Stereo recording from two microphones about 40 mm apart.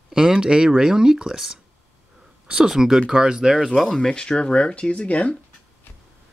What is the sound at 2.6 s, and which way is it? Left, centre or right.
Speech, centre.